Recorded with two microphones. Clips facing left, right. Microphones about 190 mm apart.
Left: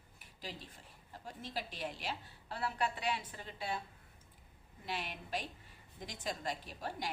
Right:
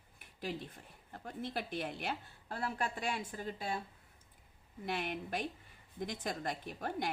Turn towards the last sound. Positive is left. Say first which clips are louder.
# right 4 dB
turn(degrees=-55)  # may be behind; listen again after turning